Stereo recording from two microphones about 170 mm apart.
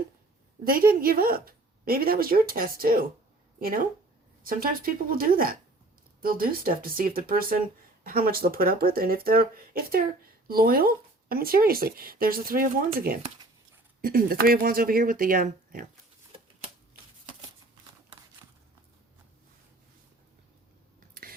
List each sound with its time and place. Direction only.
0.6 s speech: 60° right (ahead or behind)